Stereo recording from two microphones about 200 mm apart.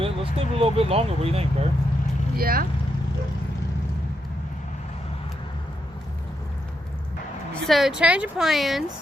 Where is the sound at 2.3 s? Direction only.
45° right (ahead or behind).